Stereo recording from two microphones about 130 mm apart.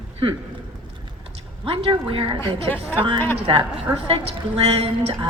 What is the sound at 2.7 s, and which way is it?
Speech, 15° left (ahead or behind).